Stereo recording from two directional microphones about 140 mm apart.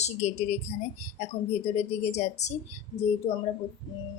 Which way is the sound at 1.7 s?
50° left (ahead or behind).